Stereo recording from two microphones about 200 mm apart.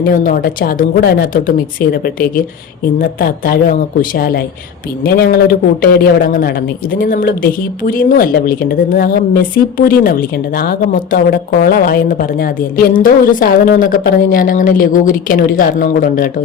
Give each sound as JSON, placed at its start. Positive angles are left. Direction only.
{"t": 0.1, "sound": "a man's voice", "side_deg": 45}